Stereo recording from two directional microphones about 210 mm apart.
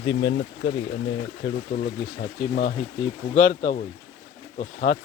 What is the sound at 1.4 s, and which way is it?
Speech, 55° left (ahead or behind).